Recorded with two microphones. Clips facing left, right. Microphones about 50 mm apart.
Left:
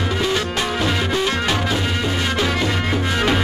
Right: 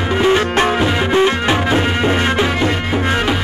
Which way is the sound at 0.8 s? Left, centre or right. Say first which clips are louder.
Right 6 dB; right.